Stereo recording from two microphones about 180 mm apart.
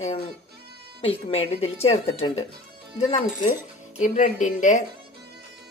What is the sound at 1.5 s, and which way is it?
Speech, 35° left (ahead or behind).